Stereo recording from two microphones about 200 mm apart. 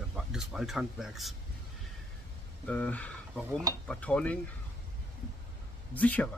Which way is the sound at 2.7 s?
5° left (ahead or behind).